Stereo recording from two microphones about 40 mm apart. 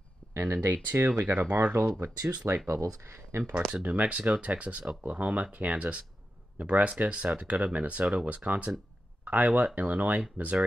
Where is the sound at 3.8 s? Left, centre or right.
Right.